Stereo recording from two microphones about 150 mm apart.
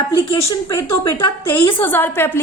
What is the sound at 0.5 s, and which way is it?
A woman's voice, 20° left (ahead or behind).